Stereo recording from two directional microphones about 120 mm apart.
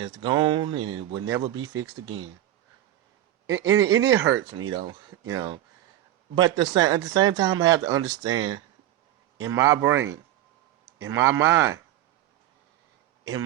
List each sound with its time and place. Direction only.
0.0 s speech: 40° right (ahead or behind)
3.5 s speech: 30° right (ahead or behind)
4.7 s speech: 40° right (ahead or behind)
9.4 s speech: 25° right (ahead or behind)
11.0 s speech: 25° right (ahead or behind)